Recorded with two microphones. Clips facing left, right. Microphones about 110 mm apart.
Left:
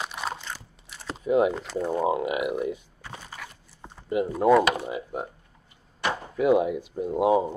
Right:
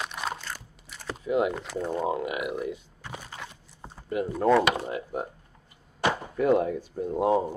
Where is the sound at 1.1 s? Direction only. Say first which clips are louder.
Left 4 dB; 25° left (ahead or behind).